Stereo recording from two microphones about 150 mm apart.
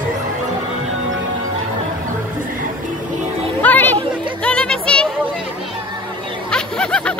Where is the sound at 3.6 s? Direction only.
10° left (ahead or behind).